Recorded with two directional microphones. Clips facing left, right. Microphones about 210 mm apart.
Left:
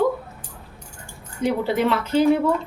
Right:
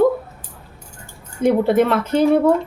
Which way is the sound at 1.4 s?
50° right (ahead or behind).